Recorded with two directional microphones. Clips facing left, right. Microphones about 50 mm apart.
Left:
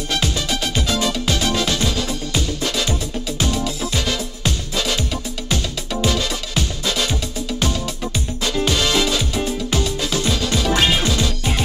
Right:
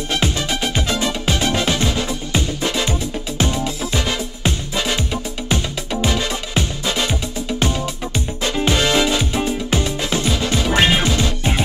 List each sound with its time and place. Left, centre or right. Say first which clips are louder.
0.1 s music: right 1 dB; right